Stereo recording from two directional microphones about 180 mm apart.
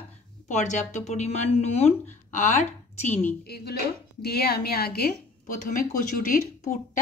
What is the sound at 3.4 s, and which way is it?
A woman's voice, 60° left (ahead or behind).